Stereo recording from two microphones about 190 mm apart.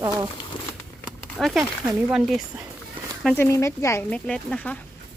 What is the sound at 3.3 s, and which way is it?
Speech, 15° left (ahead or behind).